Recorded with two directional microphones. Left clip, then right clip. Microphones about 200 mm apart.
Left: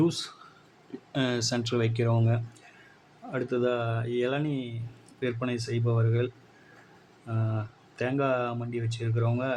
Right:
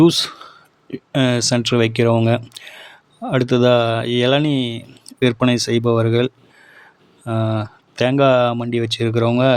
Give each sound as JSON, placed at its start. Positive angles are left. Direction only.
{"t": 0.0, "sound": "speech", "side_deg": -50}